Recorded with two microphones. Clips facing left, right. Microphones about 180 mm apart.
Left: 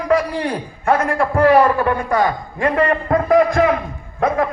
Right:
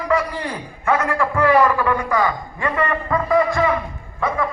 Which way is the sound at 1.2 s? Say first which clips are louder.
Left 4 dB; 35° left (ahead or behind).